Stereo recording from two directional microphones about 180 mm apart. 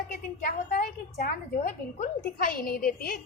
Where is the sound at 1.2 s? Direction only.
45° left (ahead or behind).